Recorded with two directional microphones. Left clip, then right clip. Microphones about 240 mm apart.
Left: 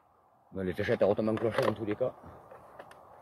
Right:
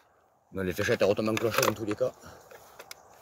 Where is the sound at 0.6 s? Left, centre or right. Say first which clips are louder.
Right 2 dB; right.